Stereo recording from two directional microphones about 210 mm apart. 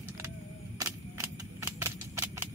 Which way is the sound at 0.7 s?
15° right (ahead or behind).